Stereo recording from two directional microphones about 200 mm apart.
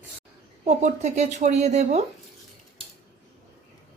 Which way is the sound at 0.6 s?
35° right (ahead or behind).